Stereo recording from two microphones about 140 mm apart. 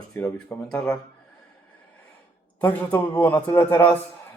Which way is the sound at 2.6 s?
10° left (ahead or behind).